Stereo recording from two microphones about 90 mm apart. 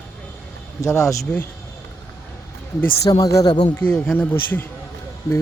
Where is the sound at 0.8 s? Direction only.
35° left (ahead or behind).